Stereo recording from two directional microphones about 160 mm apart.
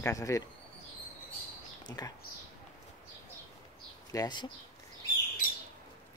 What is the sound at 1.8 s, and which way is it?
Speech, 25° left (ahead or behind).